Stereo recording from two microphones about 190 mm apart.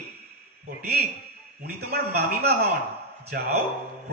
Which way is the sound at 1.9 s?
55° right (ahead or behind).